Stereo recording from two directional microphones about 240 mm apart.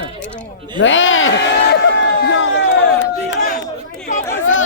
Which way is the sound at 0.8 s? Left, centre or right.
Left.